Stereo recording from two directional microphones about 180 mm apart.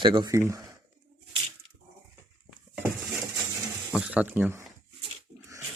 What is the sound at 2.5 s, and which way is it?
Dishes, 10° right (ahead or behind).